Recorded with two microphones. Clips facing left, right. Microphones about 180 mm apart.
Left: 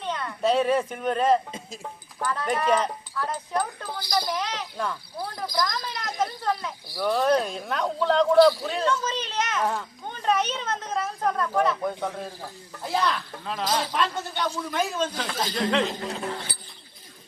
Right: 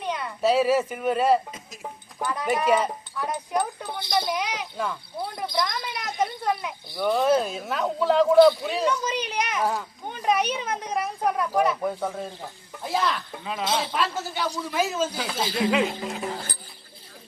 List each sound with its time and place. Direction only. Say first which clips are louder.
0.0 s speech: right 1 dB; 10° right (ahead or behind)
3.8 s speech: right 1 dB; 25° right (ahead or behind)
4.4 s speech: right 1 dB; 10° right (ahead or behind)
5.1 s speech: right 2 dB; 25° right (ahead or behind)
6.0 s speech: right 2 dB; 10° right (ahead or behind)
7.0 s speech: right 1 dB; centre (ahead or behind)
8.9 s speech: right 1 dB; 15° right (ahead or behind)